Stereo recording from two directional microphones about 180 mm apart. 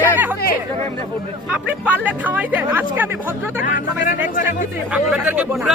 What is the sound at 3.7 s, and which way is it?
Speech, 50° left (ahead or behind).